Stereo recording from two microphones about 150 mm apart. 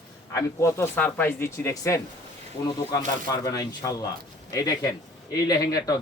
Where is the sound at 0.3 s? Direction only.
20° left (ahead or behind).